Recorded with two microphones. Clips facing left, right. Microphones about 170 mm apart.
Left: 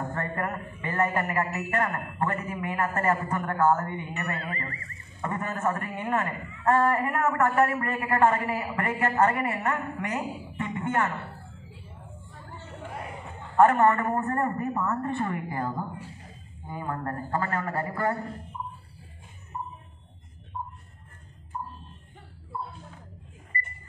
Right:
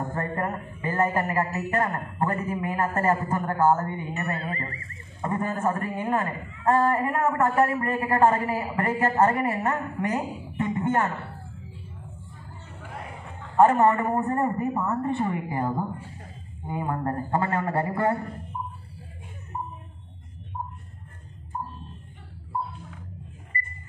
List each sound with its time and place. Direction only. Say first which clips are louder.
0.2 s a woman's voice: right 3 dB; 25° right (ahead or behind)
13.6 s a woman's voice: right 1 dB; 20° right (ahead or behind)
19.5 s a sound: right 2 dB; 40° right (ahead or behind)